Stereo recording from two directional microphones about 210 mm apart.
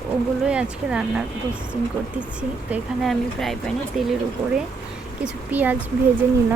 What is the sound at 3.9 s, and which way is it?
Speech, 35° right (ahead or behind).